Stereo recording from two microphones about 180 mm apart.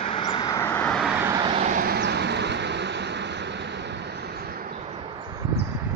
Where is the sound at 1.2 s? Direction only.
20° right (ahead or behind).